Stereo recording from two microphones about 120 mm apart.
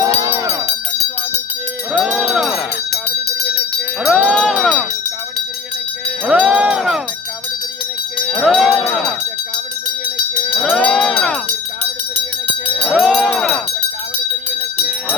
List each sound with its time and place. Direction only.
0.0 s music: 25° right (ahead or behind)
1.9 s music: 5° right (ahead or behind)
4.0 s music: centre (ahead or behind)
6.2 s a sound: 10° right (ahead or behind)
8.3 s music: 5° right (ahead or behind)
10.6 s jingle bell: 5° left (ahead or behind)
12.9 s jingle bell: centre (ahead or behind)